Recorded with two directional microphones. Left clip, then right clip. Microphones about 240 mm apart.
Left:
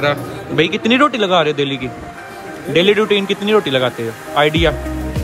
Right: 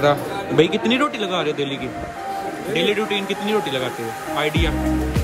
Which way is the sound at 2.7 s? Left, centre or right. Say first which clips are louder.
Left 8 dB; centre.